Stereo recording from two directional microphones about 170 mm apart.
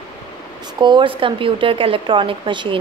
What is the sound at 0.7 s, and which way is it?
Speech, 25° right (ahead or behind).